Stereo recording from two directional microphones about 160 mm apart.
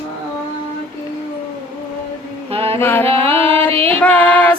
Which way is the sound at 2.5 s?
35° right (ahead or behind).